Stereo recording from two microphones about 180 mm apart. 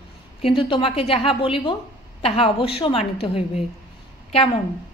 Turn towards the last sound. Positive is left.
turn(degrees=30)  # may be behind; listen again after turning